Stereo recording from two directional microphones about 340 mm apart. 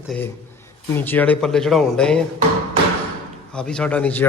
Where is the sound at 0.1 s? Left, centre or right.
Centre.